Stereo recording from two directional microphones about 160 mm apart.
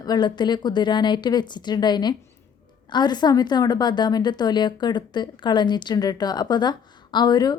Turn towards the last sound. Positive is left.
turn(degrees=25)  # may be behind; listen again after turning